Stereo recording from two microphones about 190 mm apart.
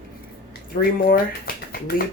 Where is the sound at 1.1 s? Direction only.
50° left (ahead or behind).